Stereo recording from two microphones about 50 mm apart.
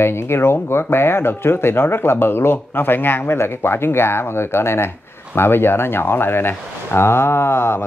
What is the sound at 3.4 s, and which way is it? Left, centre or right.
Speech, left.